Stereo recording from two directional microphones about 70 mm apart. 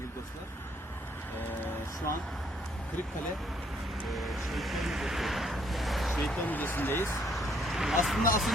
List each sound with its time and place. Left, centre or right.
4.1 s speech: centre
6.4 s speech: left
7.3 s a sound: centre